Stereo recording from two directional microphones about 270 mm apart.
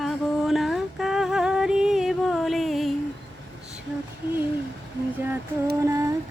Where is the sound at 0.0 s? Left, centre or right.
Centre.